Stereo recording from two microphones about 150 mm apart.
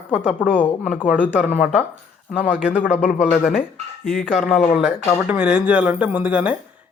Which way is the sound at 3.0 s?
60° left (ahead or behind).